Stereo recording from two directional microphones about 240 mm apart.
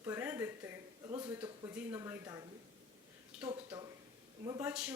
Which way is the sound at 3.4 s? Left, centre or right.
Centre.